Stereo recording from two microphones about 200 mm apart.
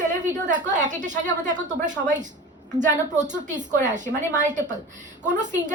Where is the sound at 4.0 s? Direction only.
35° right (ahead or behind).